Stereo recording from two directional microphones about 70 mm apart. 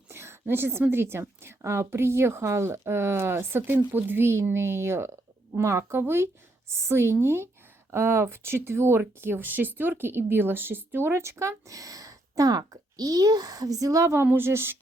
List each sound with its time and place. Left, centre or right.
0.1 s speech: right
14.3 s speech: right